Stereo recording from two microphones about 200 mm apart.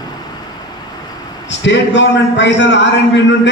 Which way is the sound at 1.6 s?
65° left (ahead or behind).